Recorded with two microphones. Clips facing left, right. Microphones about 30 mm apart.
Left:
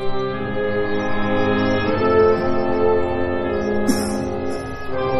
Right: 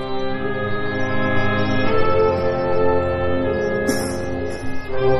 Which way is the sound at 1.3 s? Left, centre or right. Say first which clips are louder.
Left 2 dB; right.